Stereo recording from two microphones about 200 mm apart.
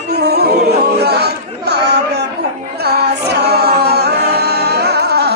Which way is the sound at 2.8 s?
55° right (ahead or behind).